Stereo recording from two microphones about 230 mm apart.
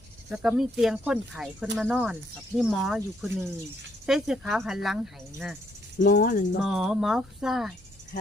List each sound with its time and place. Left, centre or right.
0.3 s speech: centre
6.0 s speech: left
6.6 s speech: centre